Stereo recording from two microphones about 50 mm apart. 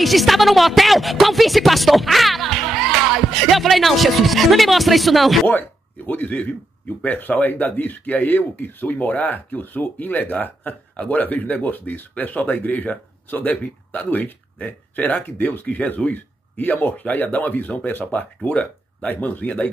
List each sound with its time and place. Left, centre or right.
0.0 s a woman's voice: centre
5.5 s speech: left
17.0 s speech: left